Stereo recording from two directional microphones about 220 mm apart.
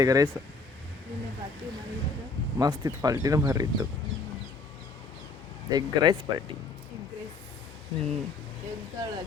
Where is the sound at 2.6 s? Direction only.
15° right (ahead or behind).